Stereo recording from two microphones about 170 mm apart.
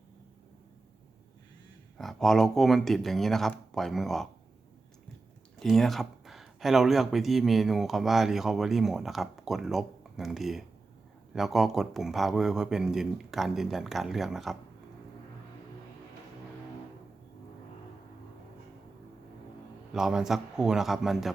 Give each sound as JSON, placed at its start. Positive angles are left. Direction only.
{"t": 2.0, "sound": "speech", "side_deg": 0}
{"t": 5.5, "sound": "speech", "side_deg": 0}
{"t": 19.9, "sound": "speech", "side_deg": -5}